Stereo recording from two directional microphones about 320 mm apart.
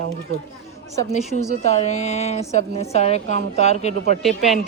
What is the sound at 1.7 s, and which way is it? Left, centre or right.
A woman's voice, left.